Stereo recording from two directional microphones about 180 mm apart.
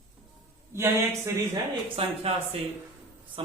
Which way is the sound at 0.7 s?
15° right (ahead or behind).